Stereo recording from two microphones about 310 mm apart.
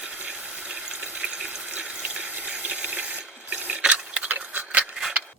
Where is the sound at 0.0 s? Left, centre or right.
Centre.